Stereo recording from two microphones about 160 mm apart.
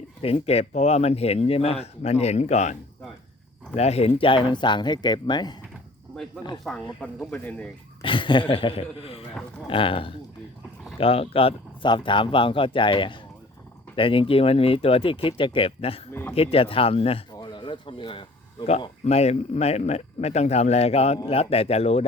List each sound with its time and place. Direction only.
0.2 s speech: 35° left (ahead or behind)
3.8 s speech: 40° left (ahead or behind)
6.7 s speech: 10° left (ahead or behind)
8.0 s speech: 30° left (ahead or behind)
17.3 s a sound: 30° left (ahead or behind)
19.0 s speech: 40° left (ahead or behind)